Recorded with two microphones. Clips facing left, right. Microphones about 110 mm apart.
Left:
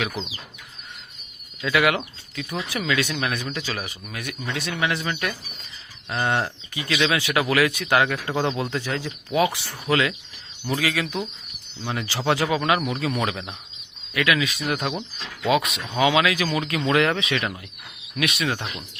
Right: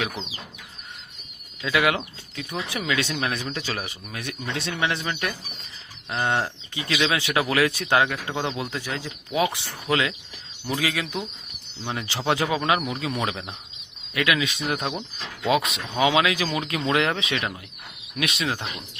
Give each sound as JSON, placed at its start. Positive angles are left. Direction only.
{"t": 1.6, "sound": "speech", "side_deg": -25}
{"t": 8.4, "sound": "speech", "side_deg": -5}
{"t": 12.8, "sound": "speech", "side_deg": -10}